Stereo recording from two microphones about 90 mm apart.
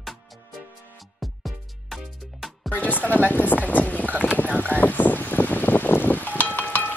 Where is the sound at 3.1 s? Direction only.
20° left (ahead or behind).